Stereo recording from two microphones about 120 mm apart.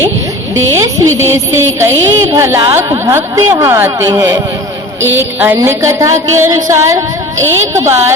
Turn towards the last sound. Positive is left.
turn(degrees=-25)  # may be behind; listen again after turning